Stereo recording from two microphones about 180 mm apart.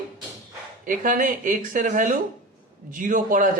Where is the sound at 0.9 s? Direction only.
45° right (ahead or behind).